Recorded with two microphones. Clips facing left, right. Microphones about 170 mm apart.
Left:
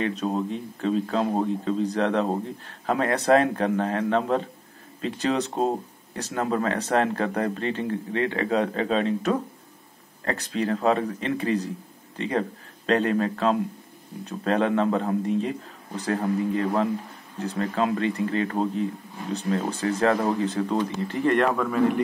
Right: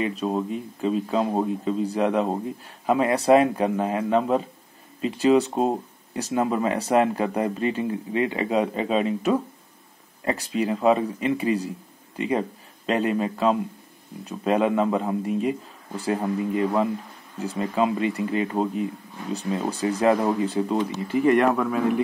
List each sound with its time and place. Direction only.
0.0 s speech: centre (ahead or behind)